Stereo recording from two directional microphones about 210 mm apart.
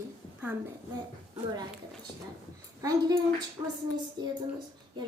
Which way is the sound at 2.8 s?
15° right (ahead or behind).